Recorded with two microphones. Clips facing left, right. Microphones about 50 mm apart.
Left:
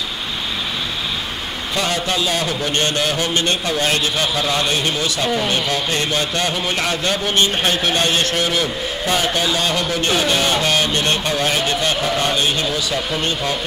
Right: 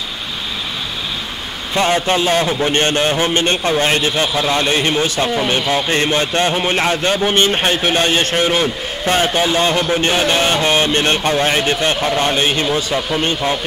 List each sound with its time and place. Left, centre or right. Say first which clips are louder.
1.8 s a man's voice: right 6 dB; right
5.5 s a man's voice: right 4 dB; right